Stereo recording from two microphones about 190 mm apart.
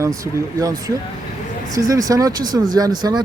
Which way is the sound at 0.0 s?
15° right (ahead or behind).